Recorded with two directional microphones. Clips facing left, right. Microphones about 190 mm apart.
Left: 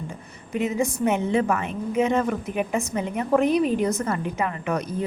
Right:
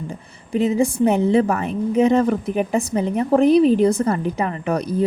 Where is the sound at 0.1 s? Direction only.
35° right (ahead or behind).